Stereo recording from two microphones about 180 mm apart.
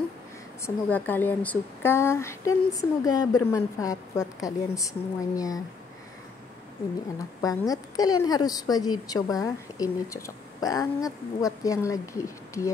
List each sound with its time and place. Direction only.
0.8 s speech: 10° left (ahead or behind)
7.4 s a woman's voice: 20° left (ahead or behind)